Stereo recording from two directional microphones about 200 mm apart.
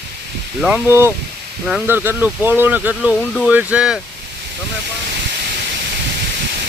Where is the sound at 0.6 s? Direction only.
10° right (ahead or behind).